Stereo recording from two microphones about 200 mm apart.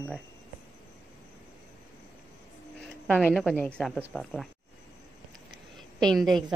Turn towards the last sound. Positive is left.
turn(degrees=0)  # may be behind; listen again after turning